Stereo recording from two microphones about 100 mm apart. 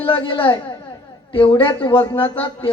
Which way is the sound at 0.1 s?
55° left (ahead or behind).